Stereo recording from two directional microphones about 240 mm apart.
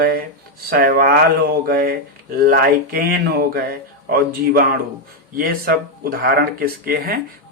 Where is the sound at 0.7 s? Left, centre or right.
Right.